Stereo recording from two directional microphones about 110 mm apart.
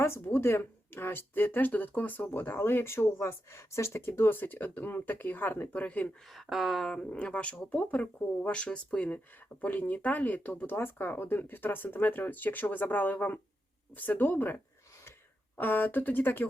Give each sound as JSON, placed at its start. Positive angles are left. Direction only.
{"t": 0.0, "sound": "speech", "side_deg": 20}
{"t": 6.3, "sound": "speech", "side_deg": 0}